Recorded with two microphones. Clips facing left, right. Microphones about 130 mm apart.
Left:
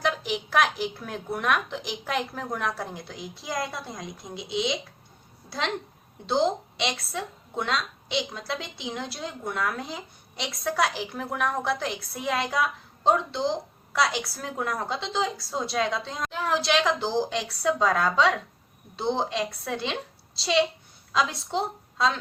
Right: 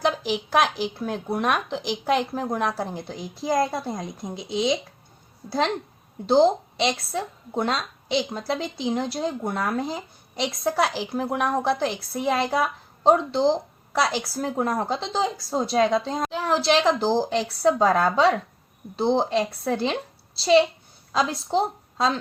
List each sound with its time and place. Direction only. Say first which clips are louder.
0.3 s a woman's voice: right 3 dB; 30° right (ahead or behind)